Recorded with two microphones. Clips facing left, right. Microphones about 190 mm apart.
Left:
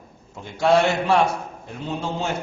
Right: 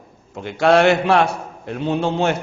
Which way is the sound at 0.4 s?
70° right (ahead or behind).